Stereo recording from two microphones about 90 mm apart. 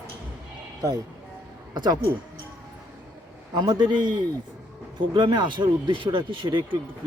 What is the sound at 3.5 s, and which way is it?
Speech, 50° right (ahead or behind).